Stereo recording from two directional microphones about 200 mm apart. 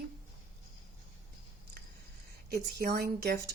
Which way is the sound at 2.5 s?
50° right (ahead or behind).